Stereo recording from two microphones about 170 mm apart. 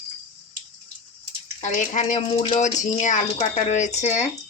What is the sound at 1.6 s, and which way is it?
Speech, 45° left (ahead or behind).